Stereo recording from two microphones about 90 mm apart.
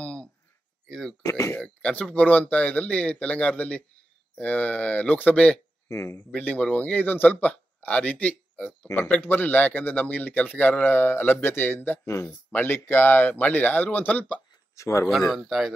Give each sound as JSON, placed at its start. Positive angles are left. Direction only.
{"t": 0.0, "sound": "a sound", "side_deg": 15}
{"t": 0.8, "sound": "speech", "side_deg": 5}
{"t": 5.9, "sound": "speech", "side_deg": 30}
{"t": 6.3, "sound": "a man's voice", "side_deg": 15}
{"t": 14.8, "sound": "speech", "side_deg": 35}
{"t": 15.0, "sound": "speech", "side_deg": 0}